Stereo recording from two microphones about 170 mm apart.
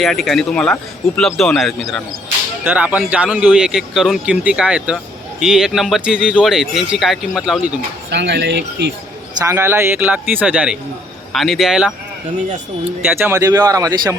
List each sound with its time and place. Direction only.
0.0 s speech: centre (ahead or behind)
8.1 s speech: 90° right
9.4 s speech: 15° right (ahead or behind)
13.1 s speech: 15° right (ahead or behind)